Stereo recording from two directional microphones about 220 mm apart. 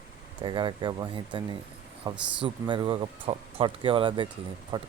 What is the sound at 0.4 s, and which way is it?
Speech, 20° right (ahead or behind).